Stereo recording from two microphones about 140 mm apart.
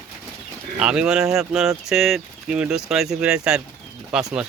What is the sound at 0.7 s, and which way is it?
Speech, 5° right (ahead or behind).